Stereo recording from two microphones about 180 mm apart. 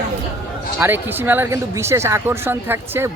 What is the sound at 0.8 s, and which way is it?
Speech, 10° right (ahead or behind).